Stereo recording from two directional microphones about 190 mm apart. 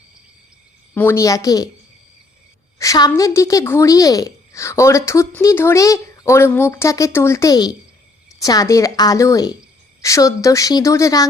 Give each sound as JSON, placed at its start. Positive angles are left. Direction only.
{"t": 0.9, "sound": "a woman's voice", "side_deg": 15}
{"t": 2.7, "sound": "a woman's voice", "side_deg": 20}